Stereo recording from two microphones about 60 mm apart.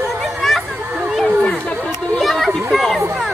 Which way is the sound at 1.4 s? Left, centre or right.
Centre.